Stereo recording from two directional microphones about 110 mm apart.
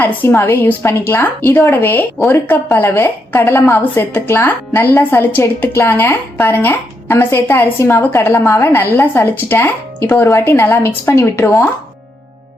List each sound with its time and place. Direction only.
0.0 s a woman's voice: 20° left (ahead or behind)